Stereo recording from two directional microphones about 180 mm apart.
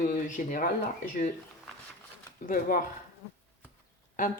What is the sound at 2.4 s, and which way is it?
Speech, 50° left (ahead or behind).